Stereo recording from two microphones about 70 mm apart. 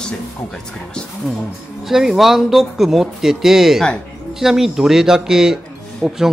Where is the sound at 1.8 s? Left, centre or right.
Centre.